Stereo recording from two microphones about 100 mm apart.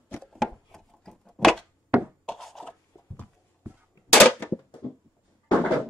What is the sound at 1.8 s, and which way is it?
Wood, 15° right (ahead or behind).